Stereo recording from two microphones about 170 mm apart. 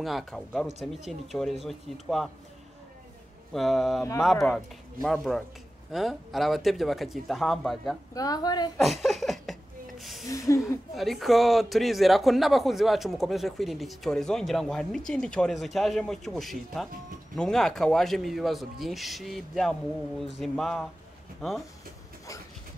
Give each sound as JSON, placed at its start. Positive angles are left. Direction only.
{"t": 0.0, "sound": "speech", "side_deg": 0}
{"t": 3.5, "sound": "speech", "side_deg": 0}
{"t": 8.1, "sound": "a woman's voice", "side_deg": 20}
{"t": 8.7, "sound": "a sound", "side_deg": 0}
{"t": 10.3, "sound": "a woman's voice", "side_deg": 20}
{"t": 11.0, "sound": "speech", "side_deg": 0}